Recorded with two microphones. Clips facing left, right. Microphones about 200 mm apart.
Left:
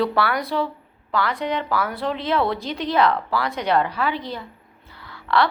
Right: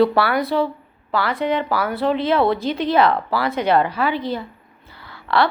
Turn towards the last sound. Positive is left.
turn(degrees=0)  # may be behind; listen again after turning